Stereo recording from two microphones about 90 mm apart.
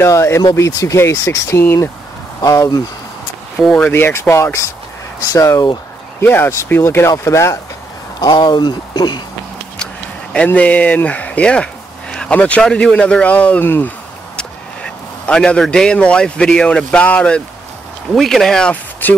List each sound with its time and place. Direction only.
0.0 s speech: 30° left (ahead or behind)
2.4 s speech: 40° left (ahead or behind)
3.5 s a man's voice: 10° left (ahead or behind)
3.9 s speech: 25° left (ahead or behind)
6.2 s speech: 25° left (ahead or behind)
8.2 s speech: 50° left (ahead or behind)
10.3 s speech: 15° left (ahead or behind)
15.2 s a man's voice: 10° left (ahead or behind)
18.1 s speech: 5° left (ahead or behind)
19.0 s speech: 20° left (ahead or behind)